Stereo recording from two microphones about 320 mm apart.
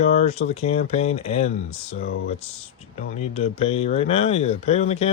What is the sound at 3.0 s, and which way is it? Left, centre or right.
Speech, centre.